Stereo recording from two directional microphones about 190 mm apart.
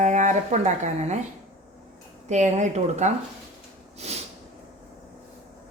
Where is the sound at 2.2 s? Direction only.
40° right (ahead or behind).